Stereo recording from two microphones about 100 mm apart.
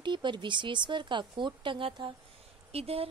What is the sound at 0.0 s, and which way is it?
Speech, 50° right (ahead or behind).